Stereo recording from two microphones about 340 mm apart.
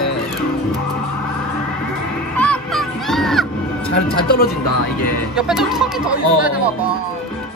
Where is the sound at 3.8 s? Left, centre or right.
Centre.